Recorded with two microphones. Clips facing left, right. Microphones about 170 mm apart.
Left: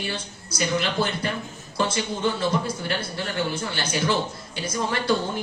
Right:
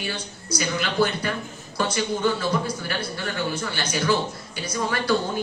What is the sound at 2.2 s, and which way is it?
A woman's voice, 25° left (ahead or behind).